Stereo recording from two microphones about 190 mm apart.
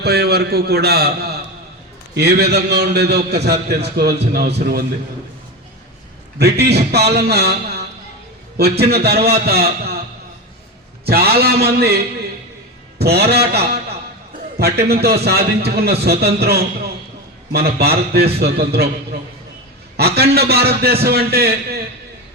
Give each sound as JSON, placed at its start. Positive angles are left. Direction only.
{"t": 0.0, "sound": "a man's voice", "side_deg": -60}
{"t": 6.4, "sound": "a man's voice", "side_deg": -60}
{"t": 11.0, "sound": "a man's voice", "side_deg": -55}
{"t": 20.0, "sound": "a man's voice", "side_deg": -55}